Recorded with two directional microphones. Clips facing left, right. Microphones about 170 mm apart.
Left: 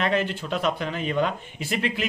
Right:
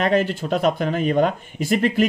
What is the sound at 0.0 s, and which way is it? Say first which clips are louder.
Speech: right 5 dB; 45° right (ahead or behind).